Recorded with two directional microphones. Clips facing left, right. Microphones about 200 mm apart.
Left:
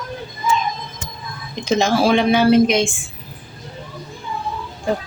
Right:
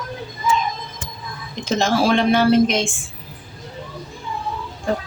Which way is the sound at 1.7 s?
Centre (ahead or behind).